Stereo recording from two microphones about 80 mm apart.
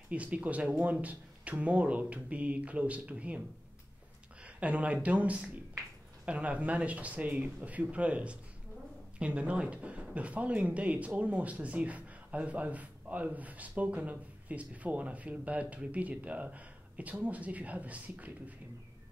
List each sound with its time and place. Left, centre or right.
0.1 s speech: centre